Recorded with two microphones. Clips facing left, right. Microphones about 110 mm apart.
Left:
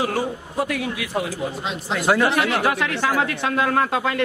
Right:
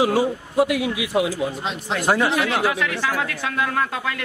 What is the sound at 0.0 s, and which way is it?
Speech, 10° right (ahead or behind).